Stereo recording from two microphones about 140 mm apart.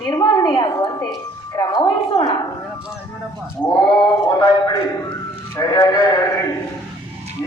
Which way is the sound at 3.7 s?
30° left (ahead or behind).